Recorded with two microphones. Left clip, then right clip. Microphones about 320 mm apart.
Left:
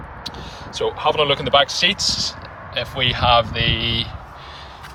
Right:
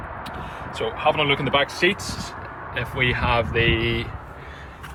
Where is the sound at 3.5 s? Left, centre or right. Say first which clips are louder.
Even; left.